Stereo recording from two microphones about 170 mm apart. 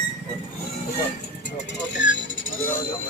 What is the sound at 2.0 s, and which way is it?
Speech, 90° left.